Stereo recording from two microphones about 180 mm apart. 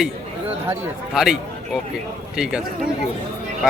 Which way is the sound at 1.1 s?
Centre (ahead or behind).